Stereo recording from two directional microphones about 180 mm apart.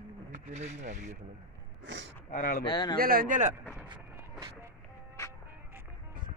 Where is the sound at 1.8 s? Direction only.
90° right.